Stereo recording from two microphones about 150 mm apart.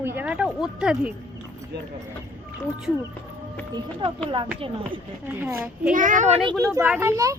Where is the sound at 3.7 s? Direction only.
35° right (ahead or behind).